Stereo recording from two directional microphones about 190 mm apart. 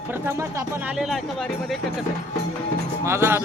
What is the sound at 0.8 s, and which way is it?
Speech, 5° right (ahead or behind).